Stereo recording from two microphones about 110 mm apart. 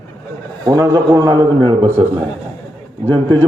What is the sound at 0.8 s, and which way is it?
Speech, 35° right (ahead or behind).